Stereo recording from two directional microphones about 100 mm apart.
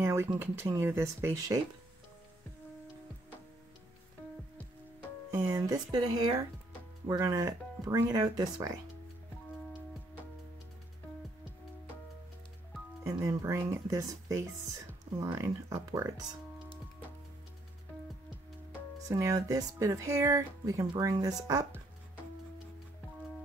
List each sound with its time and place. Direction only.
0.0 s a sound: 25° right (ahead or behind)
0.3 s speech: 25° right (ahead or behind)
5.3 s speech: 30° right (ahead or behind)
13.0 s speech: 30° right (ahead or behind)
19.0 s speech: 30° right (ahead or behind)